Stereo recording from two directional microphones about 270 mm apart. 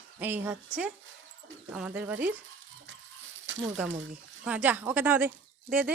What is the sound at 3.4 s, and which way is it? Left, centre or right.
Speech, right.